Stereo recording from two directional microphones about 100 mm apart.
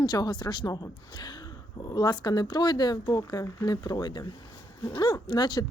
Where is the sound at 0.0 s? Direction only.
40° left (ahead or behind).